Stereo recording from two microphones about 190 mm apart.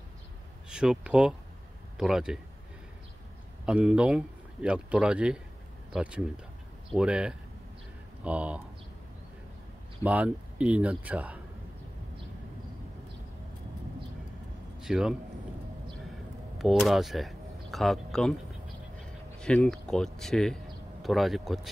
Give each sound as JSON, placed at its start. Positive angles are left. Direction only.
{"t": 0.7, "sound": "a man's voice", "side_deg": -5}
{"t": 3.6, "sound": "a man's voice", "side_deg": -5}
{"t": 10.0, "sound": "speech", "side_deg": -5}
{"t": 14.8, "sound": "a man's voice", "side_deg": 0}
{"t": 16.5, "sound": "speech", "side_deg": 0}
{"t": 19.4, "sound": "a man's voice", "side_deg": 5}